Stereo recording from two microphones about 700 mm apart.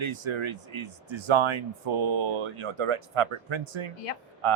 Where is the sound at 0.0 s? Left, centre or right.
Right.